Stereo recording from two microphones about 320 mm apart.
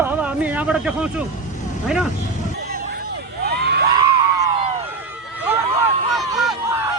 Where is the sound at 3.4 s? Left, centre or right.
Right.